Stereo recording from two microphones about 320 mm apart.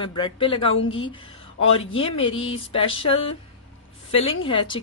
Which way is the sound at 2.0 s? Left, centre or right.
Centre.